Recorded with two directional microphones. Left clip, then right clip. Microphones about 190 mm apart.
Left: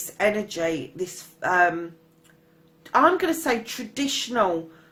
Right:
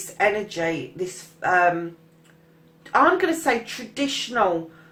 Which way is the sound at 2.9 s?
45° left (ahead or behind).